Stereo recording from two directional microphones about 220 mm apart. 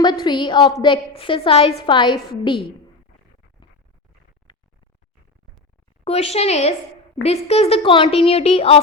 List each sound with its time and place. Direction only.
0.0 s a woman's voice: 20° left (ahead or behind)
6.1 s a woman's voice: 30° left (ahead or behind)